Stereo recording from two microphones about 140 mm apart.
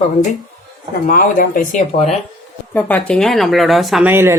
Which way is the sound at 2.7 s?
10° left (ahead or behind).